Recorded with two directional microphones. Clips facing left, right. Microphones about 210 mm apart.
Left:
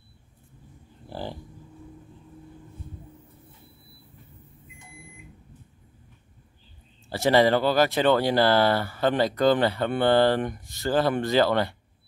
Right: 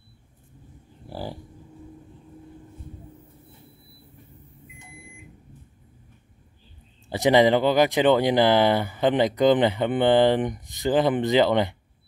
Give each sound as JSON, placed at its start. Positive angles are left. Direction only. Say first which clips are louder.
{"t": 1.0, "sound": "livestock", "louder": "right 1 dB", "side_deg": -10}
{"t": 7.1, "sound": "speech", "louder": "right 2 dB", "side_deg": -15}